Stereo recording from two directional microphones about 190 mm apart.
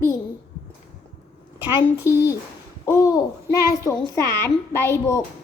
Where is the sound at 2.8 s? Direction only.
15° left (ahead or behind).